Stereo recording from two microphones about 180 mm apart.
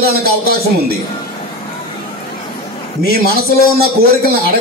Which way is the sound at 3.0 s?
60° right (ahead or behind).